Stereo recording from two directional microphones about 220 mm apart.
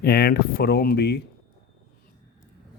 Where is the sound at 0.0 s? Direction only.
45° left (ahead or behind).